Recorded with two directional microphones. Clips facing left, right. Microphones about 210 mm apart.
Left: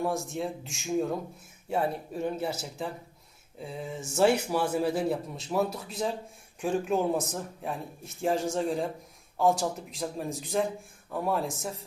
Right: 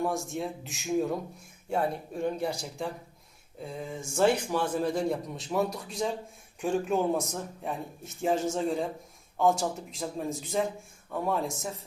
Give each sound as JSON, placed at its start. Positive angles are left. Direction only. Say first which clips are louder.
{"t": 0.0, "sound": "speech", "louder": "even", "side_deg": 0}